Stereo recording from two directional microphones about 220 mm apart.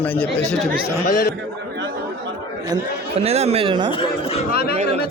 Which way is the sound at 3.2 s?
30° right (ahead or behind).